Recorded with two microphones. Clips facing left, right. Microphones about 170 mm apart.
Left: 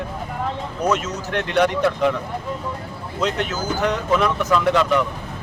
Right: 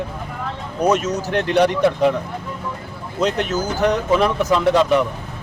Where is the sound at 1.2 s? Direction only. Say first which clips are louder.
Right 3 dB; 35° right (ahead or behind).